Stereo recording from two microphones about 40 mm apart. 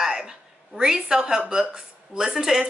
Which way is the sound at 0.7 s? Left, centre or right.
Centre.